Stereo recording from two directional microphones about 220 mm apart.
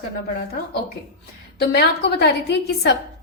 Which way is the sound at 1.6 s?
50° left (ahead or behind).